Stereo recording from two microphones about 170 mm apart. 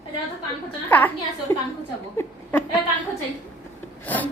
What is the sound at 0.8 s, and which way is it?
Speech, 10° left (ahead or behind).